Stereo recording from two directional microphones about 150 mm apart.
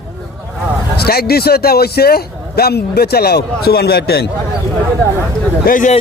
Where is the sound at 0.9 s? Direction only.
90° left.